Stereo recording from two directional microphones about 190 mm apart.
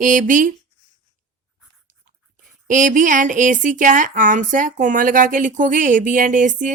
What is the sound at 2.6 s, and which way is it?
Speech, 40° right (ahead or behind).